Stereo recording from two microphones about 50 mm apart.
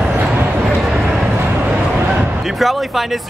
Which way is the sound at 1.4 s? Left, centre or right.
Right.